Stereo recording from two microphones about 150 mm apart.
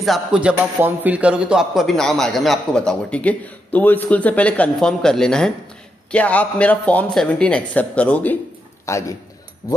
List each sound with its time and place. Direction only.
0.0 s a man's voice: 5° right (ahead or behind); by 9.8 s 25° left (ahead or behind)